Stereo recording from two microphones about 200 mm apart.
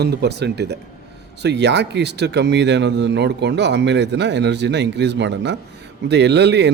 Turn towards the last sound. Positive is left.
turn(degrees=-60)  # may be behind; listen again after turning